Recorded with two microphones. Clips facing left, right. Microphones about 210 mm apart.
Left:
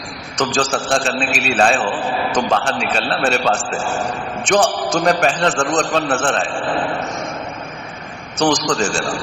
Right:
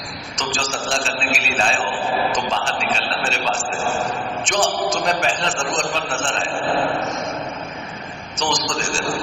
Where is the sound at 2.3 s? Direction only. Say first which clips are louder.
Left 5 dB; 60° left (ahead or behind).